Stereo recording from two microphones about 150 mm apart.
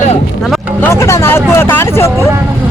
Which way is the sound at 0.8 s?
15° left (ahead or behind).